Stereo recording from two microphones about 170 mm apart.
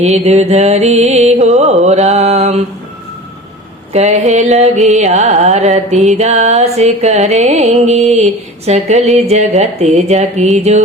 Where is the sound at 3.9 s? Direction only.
40° right (ahead or behind).